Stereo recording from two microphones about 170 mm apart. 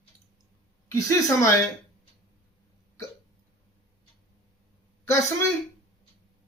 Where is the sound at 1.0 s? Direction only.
20° left (ahead or behind).